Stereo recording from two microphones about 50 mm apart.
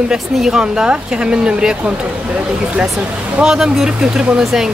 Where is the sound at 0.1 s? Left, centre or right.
Centre.